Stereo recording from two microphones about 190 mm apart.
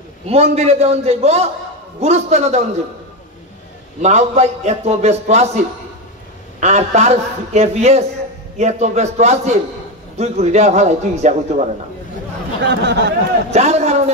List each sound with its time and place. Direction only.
0.3 s a man's voice: 35° right (ahead or behind)
4.0 s a man's voice: 35° right (ahead or behind)
6.6 s a man's voice: 35° right (ahead or behind)
12.6 s speech: 65° right (ahead or behind)
13.5 s a man's voice: 35° right (ahead or behind)